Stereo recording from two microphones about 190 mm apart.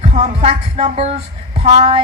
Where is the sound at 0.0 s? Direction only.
35° right (ahead or behind).